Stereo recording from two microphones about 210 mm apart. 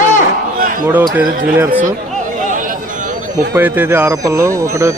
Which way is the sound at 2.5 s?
40° right (ahead or behind).